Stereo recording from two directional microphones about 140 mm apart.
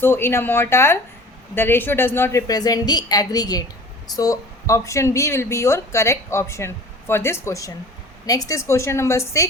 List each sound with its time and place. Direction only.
0.0 s speech: 15° left (ahead or behind)